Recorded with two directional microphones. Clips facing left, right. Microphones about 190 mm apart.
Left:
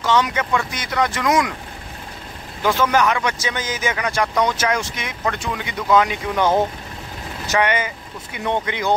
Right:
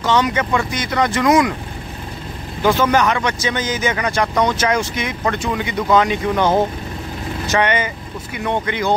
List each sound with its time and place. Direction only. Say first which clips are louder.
0.0 s speech: right 2 dB; centre (ahead or behind)
2.6 s speech: right 3 dB; centre (ahead or behind)
6.3 s speech: right 1 dB; 15° right (ahead or behind)
7.4 s speech: right 2 dB; 5° left (ahead or behind)
8.6 s speech: right 2 dB; 20° left (ahead or behind)